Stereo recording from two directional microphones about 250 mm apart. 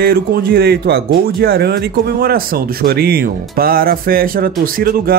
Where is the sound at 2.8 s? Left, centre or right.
Right.